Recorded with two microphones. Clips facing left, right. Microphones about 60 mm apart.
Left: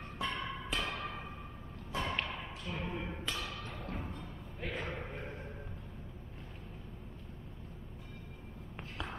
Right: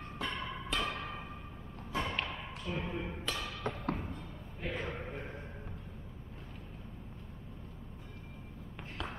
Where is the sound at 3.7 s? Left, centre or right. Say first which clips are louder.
Right 8 dB; right.